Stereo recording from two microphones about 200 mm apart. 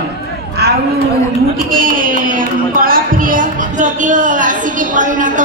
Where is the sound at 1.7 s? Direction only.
45° right (ahead or behind).